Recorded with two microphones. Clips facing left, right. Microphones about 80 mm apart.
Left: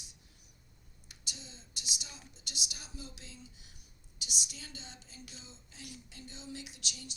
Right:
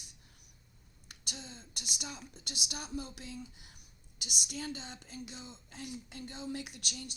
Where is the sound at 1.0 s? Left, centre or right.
Right.